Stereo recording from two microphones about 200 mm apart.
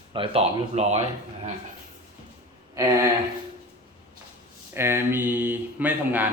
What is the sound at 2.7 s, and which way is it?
Speech, 15° right (ahead or behind).